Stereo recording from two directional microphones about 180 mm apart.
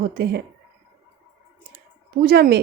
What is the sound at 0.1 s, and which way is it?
Speech, 60° right (ahead or behind).